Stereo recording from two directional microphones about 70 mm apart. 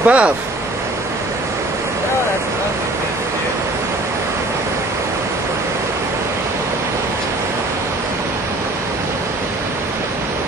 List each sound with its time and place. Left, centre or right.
0.0 s speech: right